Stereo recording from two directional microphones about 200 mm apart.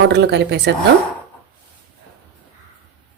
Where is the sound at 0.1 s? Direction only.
55° right (ahead or behind).